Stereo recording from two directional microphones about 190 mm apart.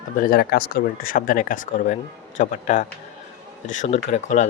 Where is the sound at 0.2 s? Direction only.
55° left (ahead or behind).